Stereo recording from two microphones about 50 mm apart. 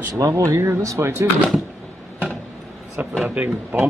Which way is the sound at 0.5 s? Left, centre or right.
Right.